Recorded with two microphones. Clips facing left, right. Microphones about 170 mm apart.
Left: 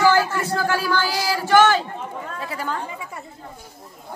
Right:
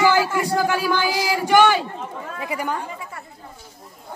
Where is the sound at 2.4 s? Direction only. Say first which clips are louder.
Right 3 dB; 15° right (ahead or behind).